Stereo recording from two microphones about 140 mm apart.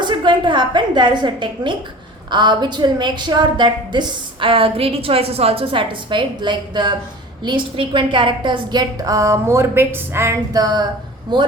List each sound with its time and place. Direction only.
0.0 s a woman's voice: 35° right (ahead or behind)